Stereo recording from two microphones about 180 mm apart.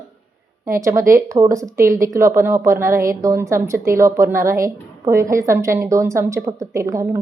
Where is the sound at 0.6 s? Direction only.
15° right (ahead or behind).